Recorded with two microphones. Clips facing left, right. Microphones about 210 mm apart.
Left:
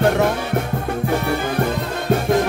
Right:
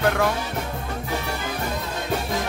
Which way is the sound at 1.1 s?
55° left (ahead or behind).